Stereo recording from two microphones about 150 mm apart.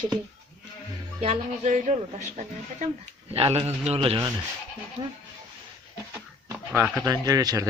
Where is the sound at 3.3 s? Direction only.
40° right (ahead or behind).